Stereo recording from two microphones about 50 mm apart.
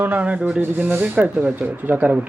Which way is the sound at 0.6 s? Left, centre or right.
Right.